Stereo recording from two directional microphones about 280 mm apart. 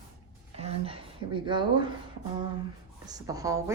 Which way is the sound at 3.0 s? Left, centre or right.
Centre.